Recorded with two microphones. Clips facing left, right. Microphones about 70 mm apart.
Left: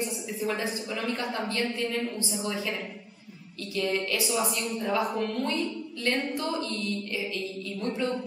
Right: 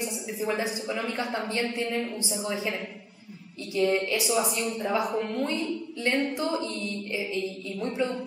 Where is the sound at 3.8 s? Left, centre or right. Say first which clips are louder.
Right 4 dB; right.